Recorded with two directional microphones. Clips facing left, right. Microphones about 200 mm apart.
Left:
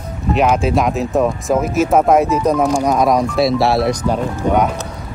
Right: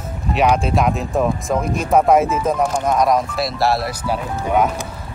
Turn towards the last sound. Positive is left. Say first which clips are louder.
# left 3 dB
turn(degrees=-5)  # may be behind; listen again after turning